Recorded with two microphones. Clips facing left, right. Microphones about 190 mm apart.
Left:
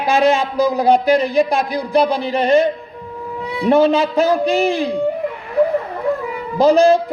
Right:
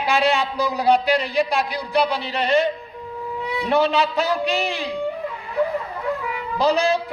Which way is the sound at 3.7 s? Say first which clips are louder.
Left 6 dB; 45° left (ahead or behind).